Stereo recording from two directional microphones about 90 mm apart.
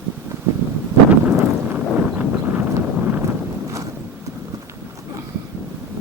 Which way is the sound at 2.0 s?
20° right (ahead or behind).